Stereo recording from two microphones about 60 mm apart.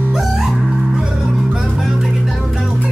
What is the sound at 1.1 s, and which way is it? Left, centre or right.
Music, centre.